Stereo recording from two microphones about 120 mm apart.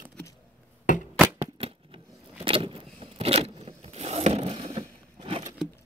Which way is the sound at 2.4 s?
50° right (ahead or behind).